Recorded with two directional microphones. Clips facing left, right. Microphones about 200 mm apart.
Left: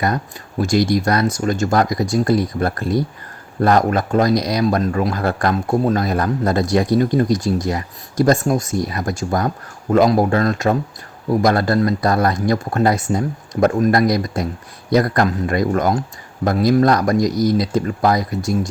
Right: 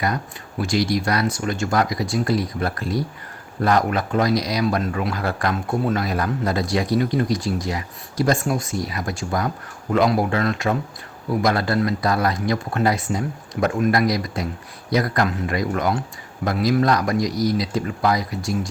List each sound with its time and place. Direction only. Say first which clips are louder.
0.6 s speech: left 5 dB; 45° left (ahead or behind)